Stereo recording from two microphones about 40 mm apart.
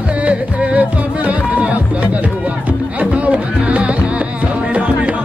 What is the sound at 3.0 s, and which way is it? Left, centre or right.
Music, right.